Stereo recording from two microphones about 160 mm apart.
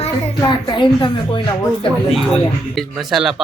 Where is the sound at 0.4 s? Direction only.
30° left (ahead or behind).